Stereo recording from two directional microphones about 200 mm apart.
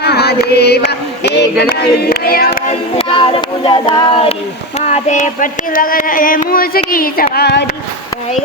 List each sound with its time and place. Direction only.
0.0 s chant: 55° left (ahead or behind)
0.9 s speech: 55° left (ahead or behind)
1.7 s a sound: 50° left (ahead or behind)
2.6 s music: 30° left (ahead or behind)
4.9 s a sound: 35° left (ahead or behind)
7.3 s speech: 55° left (ahead or behind)